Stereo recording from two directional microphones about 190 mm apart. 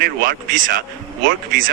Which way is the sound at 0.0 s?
50° right (ahead or behind).